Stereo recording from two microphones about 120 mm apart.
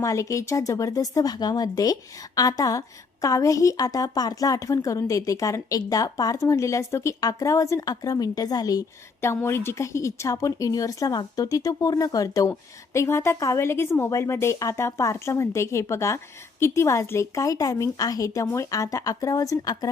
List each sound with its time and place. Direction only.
0.0 s a woman's voice: 25° left (ahead or behind)
9.2 s a woman's voice: 20° left (ahead or behind)